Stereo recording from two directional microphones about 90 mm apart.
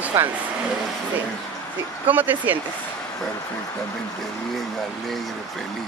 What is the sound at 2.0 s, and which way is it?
Speech, 20° right (ahead or behind).